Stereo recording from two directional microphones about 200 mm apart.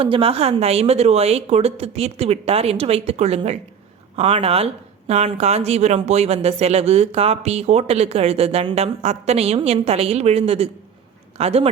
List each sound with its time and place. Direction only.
0.0 s a woman's voice: 25° right (ahead or behind)